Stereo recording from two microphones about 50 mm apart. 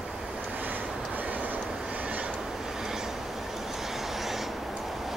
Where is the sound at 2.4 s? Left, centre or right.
Centre.